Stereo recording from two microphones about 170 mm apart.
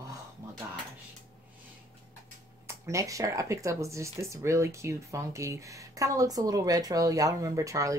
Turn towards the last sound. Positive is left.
turn(degrees=-20)  # may be behind; listen again after turning